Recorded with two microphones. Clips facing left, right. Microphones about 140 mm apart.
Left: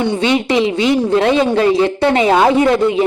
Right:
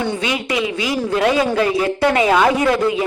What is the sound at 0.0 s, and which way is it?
Speech, 25° left (ahead or behind).